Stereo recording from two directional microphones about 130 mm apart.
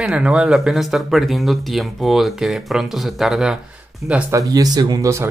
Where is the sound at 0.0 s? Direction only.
5° right (ahead or behind).